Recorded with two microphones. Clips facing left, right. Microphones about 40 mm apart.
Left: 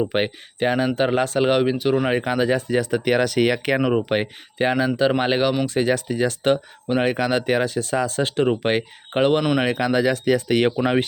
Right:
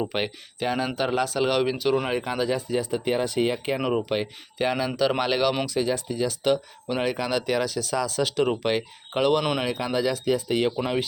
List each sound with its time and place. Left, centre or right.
0.1 s speech: left
1.5 s speech: left
2.2 s speech: left
2.6 s speech: left
3.8 s speech: centre
4.1 s speech: left
5.6 s speech: left
6.8 s speech: left
7.1 s speech: left
9.6 s speech: left